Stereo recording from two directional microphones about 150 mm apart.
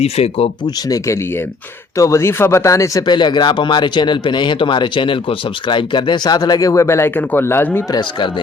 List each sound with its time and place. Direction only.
0.0 s speech: 40° left (ahead or behind)
0.9 s speech: 20° left (ahead or behind)